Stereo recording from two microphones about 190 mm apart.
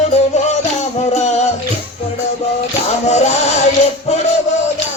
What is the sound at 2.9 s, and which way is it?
Music, 35° left (ahead or behind).